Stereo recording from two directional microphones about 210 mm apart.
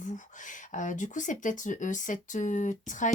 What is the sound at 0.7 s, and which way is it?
Speech, 35° left (ahead or behind).